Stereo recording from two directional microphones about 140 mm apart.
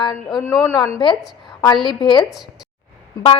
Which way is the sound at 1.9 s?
35° left (ahead or behind).